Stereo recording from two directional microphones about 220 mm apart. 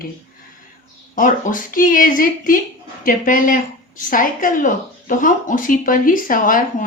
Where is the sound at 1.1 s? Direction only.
35° left (ahead or behind).